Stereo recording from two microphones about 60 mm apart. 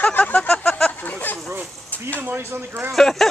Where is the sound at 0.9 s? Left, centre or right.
Left.